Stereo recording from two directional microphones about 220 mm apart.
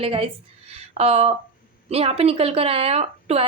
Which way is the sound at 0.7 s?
30° right (ahead or behind).